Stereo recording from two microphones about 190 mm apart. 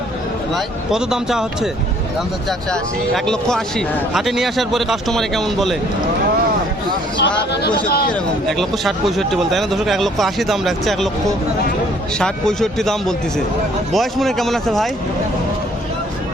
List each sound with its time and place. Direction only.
0.5 s speech: 5° right (ahead or behind)
3.2 s speech: 5° left (ahead or behind)
7.2 s speech: 65° left (ahead or behind)
8.1 s speech: centre (ahead or behind)
12.2 s speech: 5° left (ahead or behind)